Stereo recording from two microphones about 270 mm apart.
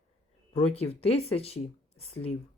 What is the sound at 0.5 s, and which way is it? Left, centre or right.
Speech, left.